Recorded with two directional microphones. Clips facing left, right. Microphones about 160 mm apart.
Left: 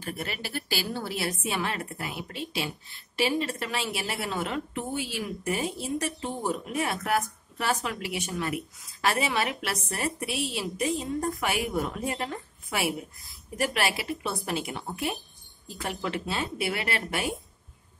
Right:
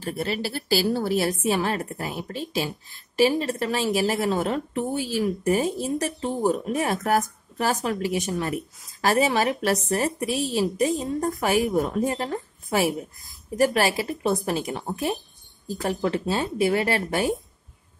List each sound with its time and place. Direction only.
0.0 s a woman's voice: 30° right (ahead or behind)